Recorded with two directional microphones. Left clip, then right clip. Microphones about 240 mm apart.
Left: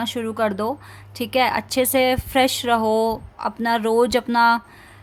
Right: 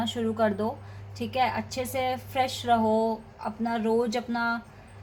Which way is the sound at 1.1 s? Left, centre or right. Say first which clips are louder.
Left 7 dB; left.